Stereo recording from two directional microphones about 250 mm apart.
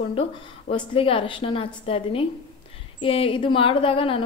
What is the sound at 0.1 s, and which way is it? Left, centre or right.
A woman's voice, left.